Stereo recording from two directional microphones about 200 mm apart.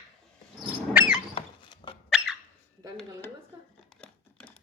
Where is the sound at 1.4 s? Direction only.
25° left (ahead or behind).